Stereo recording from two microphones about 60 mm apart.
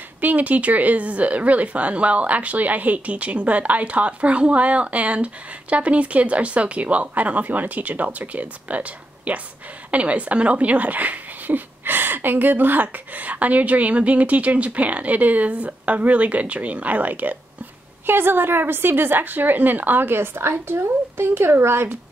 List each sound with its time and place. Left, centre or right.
0.2 s a woman's voice: right